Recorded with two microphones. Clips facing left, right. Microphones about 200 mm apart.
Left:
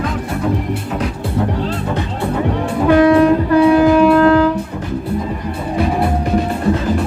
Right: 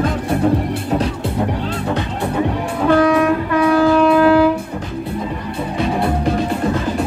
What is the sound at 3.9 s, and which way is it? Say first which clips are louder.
Wind instrument: left 1 dB; centre (ahead or behind).